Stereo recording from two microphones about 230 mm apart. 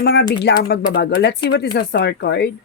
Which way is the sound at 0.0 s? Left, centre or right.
Left.